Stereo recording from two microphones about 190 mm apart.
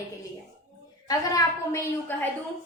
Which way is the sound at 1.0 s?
15° left (ahead or behind).